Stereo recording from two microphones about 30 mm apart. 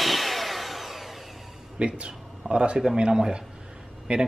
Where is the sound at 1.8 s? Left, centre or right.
Right.